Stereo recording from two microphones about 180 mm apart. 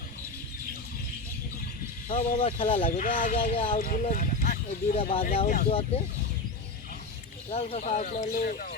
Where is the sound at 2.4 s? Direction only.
30° left (ahead or behind).